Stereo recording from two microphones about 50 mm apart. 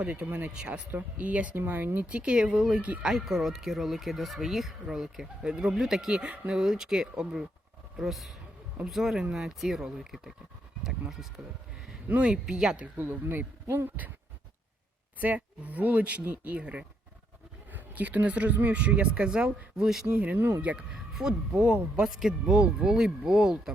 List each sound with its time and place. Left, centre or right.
0.1 s speech: right
0.7 s speech: right
1.6 s speech: right
2.0 s speech: right
2.7 s speech: right
3.1 s speech: centre; by 6.6 s right
6.6 s a man's voice: centre
12.2 s speech: centre
12.8 s speech: right
15.4 s speech: right
20.1 s speech: right
20.9 s speech: centre
22.5 s speech: centre